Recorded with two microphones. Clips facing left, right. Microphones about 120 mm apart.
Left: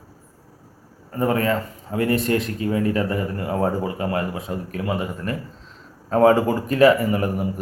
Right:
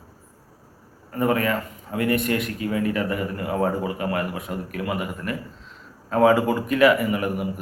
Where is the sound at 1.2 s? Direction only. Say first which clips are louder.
Left 1 dB; 30° left (ahead or behind).